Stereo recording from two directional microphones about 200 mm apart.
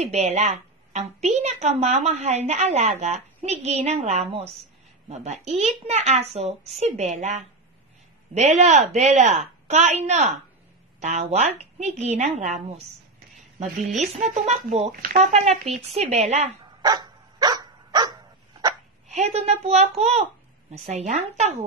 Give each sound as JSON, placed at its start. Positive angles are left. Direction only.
{"t": 0.0, "sound": "a woman's voice", "side_deg": -35}
{"t": 13.9, "sound": "a woman's voice", "side_deg": -35}
{"t": 16.8, "sound": "dog", "side_deg": -20}
{"t": 19.0, "sound": "a woman's voice", "side_deg": -35}